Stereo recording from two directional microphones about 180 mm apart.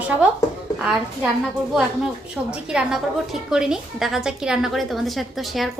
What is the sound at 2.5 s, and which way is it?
A woman's voice, 5° right (ahead or behind).